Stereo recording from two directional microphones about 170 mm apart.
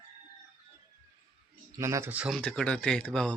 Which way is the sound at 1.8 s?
15° right (ahead or behind).